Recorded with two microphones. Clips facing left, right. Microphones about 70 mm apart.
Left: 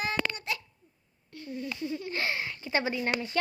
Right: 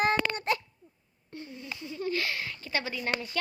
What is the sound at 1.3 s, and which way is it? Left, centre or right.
Speech, right.